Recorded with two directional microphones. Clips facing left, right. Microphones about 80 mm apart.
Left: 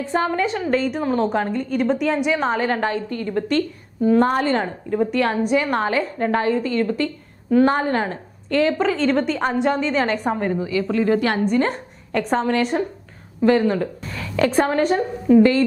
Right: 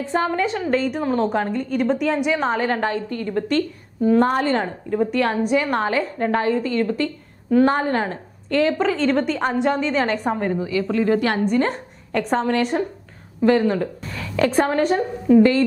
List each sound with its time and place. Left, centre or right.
0.1 s a woman's voice: centre